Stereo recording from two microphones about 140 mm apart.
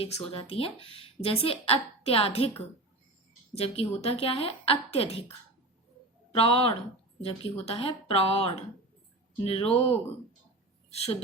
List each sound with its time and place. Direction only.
0.0 s speech: 40° left (ahead or behind)
3.6 s speech: 45° left (ahead or behind)
6.3 s speech: 45° left (ahead or behind)